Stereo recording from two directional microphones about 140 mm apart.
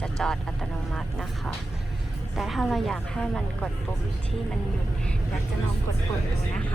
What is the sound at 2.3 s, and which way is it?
A woman's voice, centre (ahead or behind).